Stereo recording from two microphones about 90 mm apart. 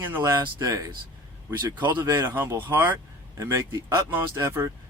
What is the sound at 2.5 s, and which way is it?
Speech, 25° right (ahead or behind).